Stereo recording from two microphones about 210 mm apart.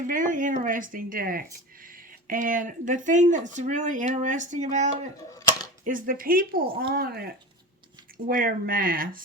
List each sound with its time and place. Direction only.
0.1 s speech: 40° right (ahead or behind)
8.3 s speech: 45° right (ahead or behind)